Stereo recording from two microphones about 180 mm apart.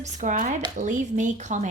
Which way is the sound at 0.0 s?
40° right (ahead or behind).